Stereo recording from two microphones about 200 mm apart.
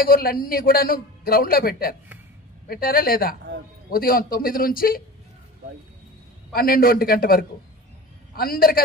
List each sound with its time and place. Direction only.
0.0 s a man's voice: 45° left (ahead or behind)
6.5 s a man's voice: 45° left (ahead or behind)